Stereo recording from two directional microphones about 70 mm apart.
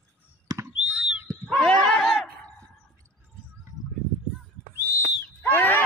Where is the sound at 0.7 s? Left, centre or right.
Centre.